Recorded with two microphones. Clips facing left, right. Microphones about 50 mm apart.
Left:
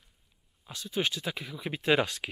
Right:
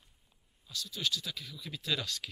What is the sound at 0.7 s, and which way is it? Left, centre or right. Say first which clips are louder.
Speech: left 5 dB; left.